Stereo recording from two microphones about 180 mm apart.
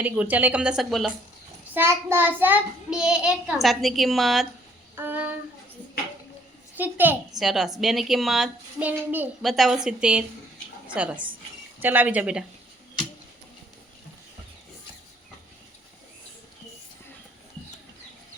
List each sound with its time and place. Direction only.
0.0 s speech: 10° right (ahead or behind)
1.7 s a child's voice: 15° right (ahead or behind)
4.9 s a sound: 10° right (ahead or behind)
6.7 s a child's voice: 10° right (ahead or behind)